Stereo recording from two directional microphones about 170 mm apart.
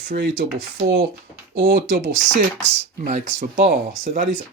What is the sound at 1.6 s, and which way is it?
Speech, 55° right (ahead or behind).